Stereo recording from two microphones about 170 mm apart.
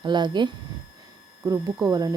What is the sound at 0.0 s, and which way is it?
Speech, 25° right (ahead or behind).